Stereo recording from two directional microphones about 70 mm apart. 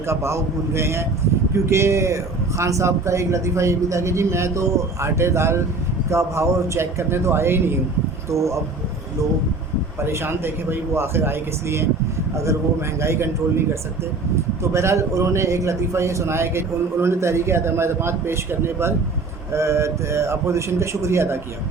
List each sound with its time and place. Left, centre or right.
0.1 s a man's voice: right
8.3 s speech: right
10.0 s a man's voice: right
13.0 s a man's voice: right
14.6 s a man's voice: right